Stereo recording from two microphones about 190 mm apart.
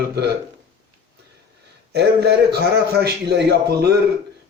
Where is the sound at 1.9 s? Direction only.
60° right (ahead or behind).